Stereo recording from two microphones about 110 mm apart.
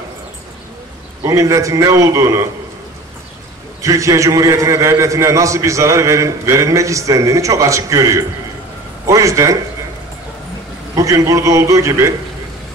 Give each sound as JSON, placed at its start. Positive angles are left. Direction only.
{"t": 1.2, "sound": "a man's voice", "side_deg": -30}
{"t": 3.8, "sound": "a man's voice", "side_deg": -30}
{"t": 11.0, "sound": "a man's voice", "side_deg": -30}